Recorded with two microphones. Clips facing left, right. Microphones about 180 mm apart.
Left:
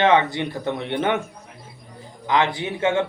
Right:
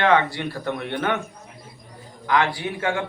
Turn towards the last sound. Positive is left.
turn(degrees=25)  # may be behind; listen again after turning